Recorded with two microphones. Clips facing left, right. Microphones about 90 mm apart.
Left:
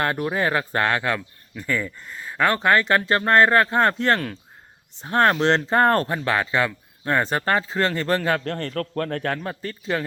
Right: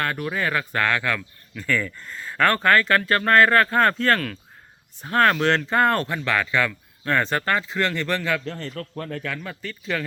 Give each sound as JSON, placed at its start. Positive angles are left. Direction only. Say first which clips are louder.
{"t": 0.0, "sound": "speech", "louder": "left 3 dB", "side_deg": 20}
{"t": 8.4, "sound": "speech", "louder": "left 5 dB", "side_deg": 55}
{"t": 9.4, "sound": "speech", "louder": "left 4 dB", "side_deg": 40}